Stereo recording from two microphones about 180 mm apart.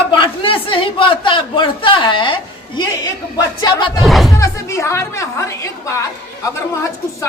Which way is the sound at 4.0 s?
Centre (ahead or behind).